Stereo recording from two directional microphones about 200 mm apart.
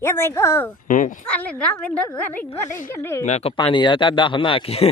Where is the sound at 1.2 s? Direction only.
5° left (ahead or behind).